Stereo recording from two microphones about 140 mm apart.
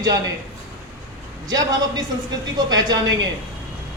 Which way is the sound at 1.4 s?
30° right (ahead or behind).